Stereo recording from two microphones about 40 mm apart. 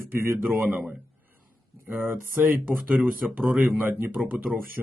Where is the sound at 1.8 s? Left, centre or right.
Right.